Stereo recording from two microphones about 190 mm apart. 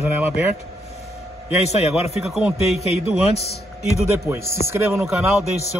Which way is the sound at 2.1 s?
Centre (ahead or behind).